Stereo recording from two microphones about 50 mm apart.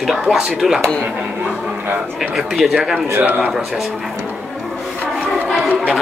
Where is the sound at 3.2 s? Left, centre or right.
Right.